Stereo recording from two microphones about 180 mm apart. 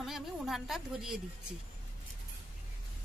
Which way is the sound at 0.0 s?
Centre (ahead or behind).